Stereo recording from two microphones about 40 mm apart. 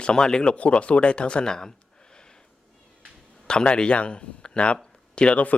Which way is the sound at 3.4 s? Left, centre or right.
Left.